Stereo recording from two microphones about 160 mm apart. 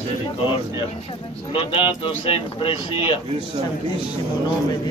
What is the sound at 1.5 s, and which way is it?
Speech, 35° left (ahead or behind).